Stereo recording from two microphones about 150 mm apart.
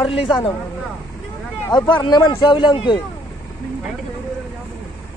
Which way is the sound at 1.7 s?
30° left (ahead or behind).